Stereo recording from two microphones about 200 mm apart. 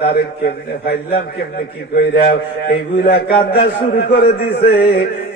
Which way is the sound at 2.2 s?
50° left (ahead or behind).